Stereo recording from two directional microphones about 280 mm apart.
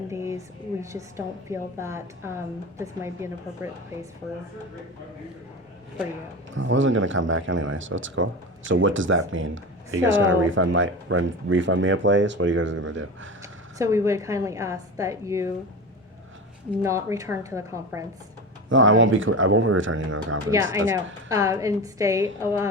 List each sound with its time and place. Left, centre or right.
0.1 s a woman's voice: centre
6.5 s speech: right
13.4 s a woman's voice: centre
16.8 s a woman's voice: centre
18.7 s speech: right
20.9 s a woman's voice: centre